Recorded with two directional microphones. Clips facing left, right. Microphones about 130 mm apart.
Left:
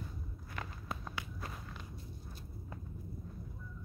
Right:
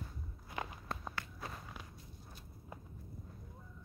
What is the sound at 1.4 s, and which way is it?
Walk, 5° right (ahead or behind).